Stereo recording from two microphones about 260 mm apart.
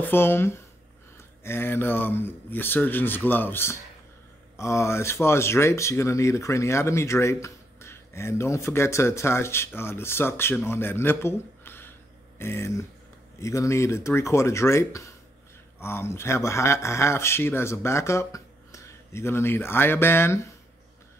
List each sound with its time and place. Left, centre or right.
0.0 s speech: centre